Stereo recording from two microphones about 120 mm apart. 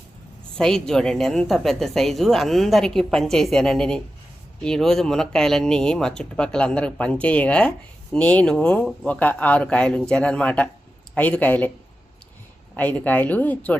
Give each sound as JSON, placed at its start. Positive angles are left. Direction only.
{"t": 0.5, "sound": "a woman's voice", "side_deg": 5}
{"t": 12.7, "sound": "speech", "side_deg": 15}